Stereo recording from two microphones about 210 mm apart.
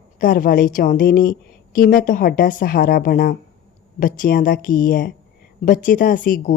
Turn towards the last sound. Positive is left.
turn(degrees=40)  # may be behind; listen again after turning